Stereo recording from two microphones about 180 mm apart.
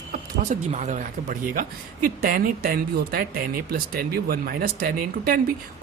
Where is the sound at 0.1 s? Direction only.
45° right (ahead or behind).